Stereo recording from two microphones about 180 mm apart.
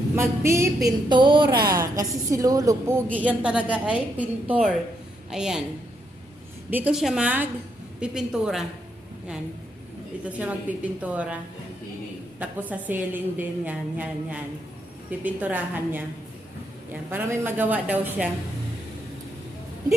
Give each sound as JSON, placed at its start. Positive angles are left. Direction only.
{"t": 0.2, "sound": "a woman's voice", "side_deg": -15}
{"t": 6.7, "sound": "a woman's voice", "side_deg": -10}
{"t": 10.2, "sound": "a woman's voice", "side_deg": -10}
{"t": 12.4, "sound": "a woman's voice", "side_deg": -10}